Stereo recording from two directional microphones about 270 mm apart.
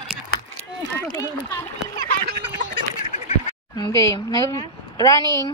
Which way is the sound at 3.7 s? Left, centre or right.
Centre.